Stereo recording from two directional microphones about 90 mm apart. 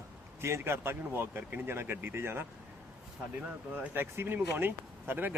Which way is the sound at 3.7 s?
25° right (ahead or behind).